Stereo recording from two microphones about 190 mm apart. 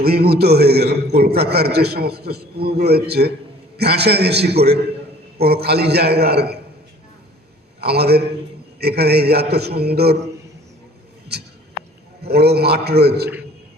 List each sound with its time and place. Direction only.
0.0 s a man's voice: 55° right (ahead or behind)
7.8 s a man's voice: 60° right (ahead or behind)
12.2 s a man's voice: 55° right (ahead or behind)